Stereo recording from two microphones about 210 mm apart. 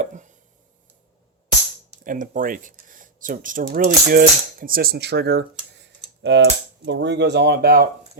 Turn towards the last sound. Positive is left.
turn(degrees=-45)  # may be behind; listen again after turning